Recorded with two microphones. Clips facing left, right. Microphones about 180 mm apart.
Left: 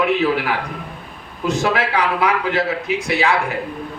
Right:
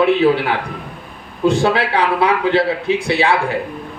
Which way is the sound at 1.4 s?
30° right (ahead or behind).